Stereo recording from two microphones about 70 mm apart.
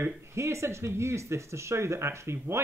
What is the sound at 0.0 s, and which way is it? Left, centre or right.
Speech, right.